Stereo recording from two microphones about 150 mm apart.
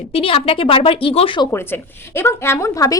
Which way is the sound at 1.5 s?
15° left (ahead or behind).